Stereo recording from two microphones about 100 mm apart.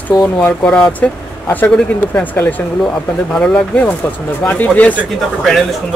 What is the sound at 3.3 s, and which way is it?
Speech, 10° left (ahead or behind).